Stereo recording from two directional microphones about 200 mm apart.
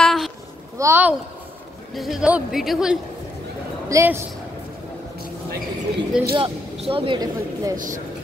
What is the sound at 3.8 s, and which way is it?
Speech, 15° right (ahead or behind).